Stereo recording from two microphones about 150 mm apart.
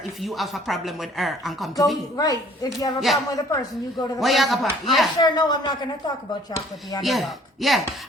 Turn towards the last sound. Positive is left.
turn(degrees=0)  # may be behind; listen again after turning